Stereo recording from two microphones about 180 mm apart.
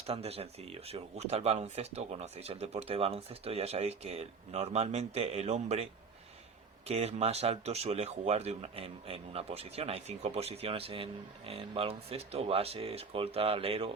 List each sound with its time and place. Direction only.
0.1 s speech: 35° right (ahead or behind)